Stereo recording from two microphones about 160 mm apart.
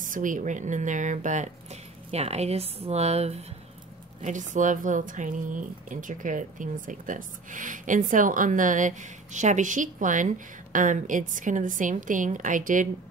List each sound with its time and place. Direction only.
0.0 s speech: 55° right (ahead or behind)